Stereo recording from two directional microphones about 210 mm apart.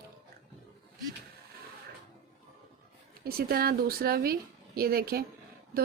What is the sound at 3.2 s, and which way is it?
Speech, 45° right (ahead or behind).